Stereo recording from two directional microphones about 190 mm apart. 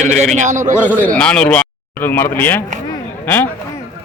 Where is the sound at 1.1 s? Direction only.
5° left (ahead or behind).